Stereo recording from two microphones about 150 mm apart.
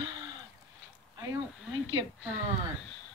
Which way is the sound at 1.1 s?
25° right (ahead or behind).